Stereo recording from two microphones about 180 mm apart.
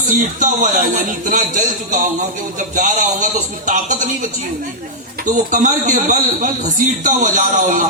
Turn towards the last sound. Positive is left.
turn(degrees=-45)  # may be behind; listen again after turning